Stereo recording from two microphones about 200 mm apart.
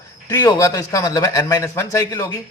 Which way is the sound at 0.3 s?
15° left (ahead or behind).